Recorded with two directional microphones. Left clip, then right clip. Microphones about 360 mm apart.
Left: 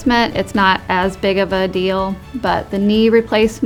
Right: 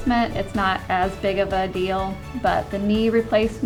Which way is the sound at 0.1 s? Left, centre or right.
Left.